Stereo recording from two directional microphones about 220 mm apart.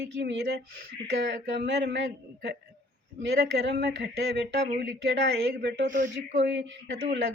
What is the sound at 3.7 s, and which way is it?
Speech, 50° right (ahead or behind).